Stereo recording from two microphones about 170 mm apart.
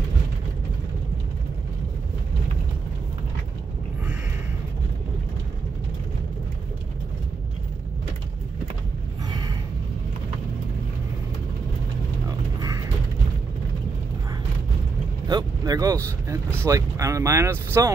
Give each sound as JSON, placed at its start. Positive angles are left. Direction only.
{"t": 15.2, "sound": "speech", "side_deg": -25}